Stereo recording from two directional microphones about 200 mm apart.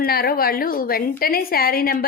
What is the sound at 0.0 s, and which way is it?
A woman's voice, 50° left (ahead or behind).